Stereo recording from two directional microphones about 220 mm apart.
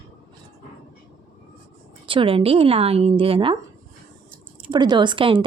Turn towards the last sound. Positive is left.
turn(degrees=-25)  # may be behind; listen again after turning